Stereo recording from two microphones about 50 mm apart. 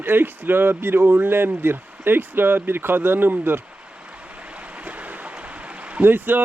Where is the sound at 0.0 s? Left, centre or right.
Right.